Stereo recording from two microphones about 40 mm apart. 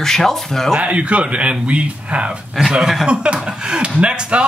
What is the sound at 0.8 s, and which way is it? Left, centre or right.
A man's voice, right.